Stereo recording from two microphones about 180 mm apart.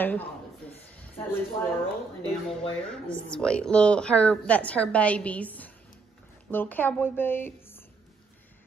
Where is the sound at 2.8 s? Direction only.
5° left (ahead or behind).